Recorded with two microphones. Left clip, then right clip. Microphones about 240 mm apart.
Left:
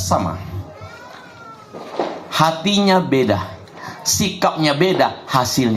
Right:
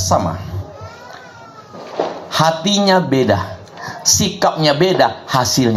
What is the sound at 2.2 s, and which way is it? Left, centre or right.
Speech, right.